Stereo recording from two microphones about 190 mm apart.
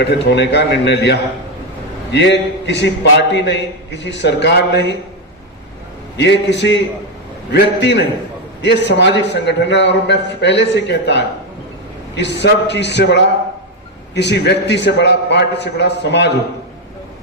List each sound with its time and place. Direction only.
0.0 s a man's voice: 65° left (ahead or behind)
6.1 s a man's voice: 65° left (ahead or behind)